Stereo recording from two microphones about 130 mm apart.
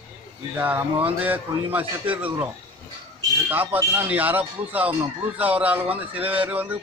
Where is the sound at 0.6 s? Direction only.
15° right (ahead or behind).